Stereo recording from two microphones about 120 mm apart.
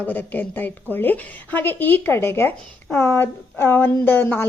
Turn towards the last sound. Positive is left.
turn(degrees=15)  # may be behind; listen again after turning